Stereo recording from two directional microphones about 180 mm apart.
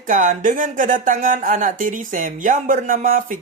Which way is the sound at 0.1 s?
45° right (ahead or behind).